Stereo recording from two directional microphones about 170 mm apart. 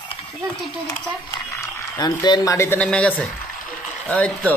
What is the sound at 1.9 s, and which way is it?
Speech, 25° left (ahead or behind).